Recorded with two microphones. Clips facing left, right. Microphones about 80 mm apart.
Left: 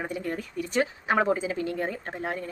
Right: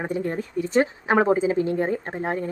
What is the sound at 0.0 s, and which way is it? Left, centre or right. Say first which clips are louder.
A woman's voice: right 5 dB; right.